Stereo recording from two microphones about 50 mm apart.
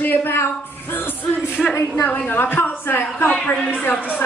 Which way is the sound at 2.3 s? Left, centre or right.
Left.